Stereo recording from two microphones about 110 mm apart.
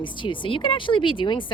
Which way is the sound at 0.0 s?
50° left (ahead or behind).